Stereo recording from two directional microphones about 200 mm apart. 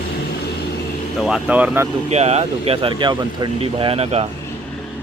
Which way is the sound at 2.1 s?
30° right (ahead or behind).